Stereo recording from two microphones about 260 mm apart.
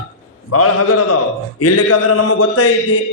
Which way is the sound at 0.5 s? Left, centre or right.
Left.